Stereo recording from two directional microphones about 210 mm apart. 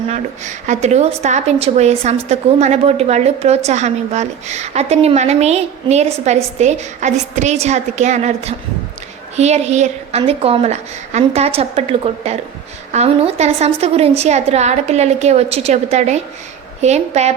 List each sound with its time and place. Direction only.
0.1 s a woman's voice: 35° right (ahead or behind)